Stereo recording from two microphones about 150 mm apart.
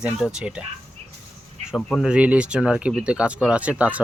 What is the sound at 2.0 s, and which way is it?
Speech, 5° right (ahead or behind).